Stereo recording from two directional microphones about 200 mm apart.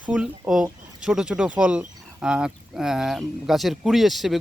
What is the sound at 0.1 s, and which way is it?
Speech, 5° right (ahead or behind).